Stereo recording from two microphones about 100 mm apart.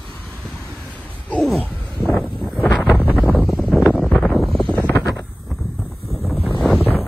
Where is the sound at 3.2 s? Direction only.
Centre (ahead or behind).